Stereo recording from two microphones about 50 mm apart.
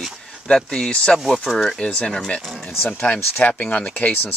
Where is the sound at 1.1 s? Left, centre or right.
Centre.